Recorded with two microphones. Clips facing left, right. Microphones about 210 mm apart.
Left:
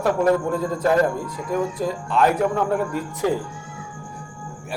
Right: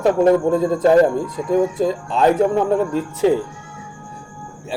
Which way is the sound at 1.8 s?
25° right (ahead or behind).